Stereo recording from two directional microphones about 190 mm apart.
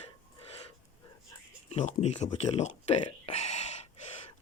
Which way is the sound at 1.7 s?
35° left (ahead or behind).